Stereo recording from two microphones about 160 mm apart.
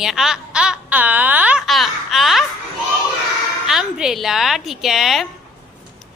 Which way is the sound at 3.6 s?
5° right (ahead or behind).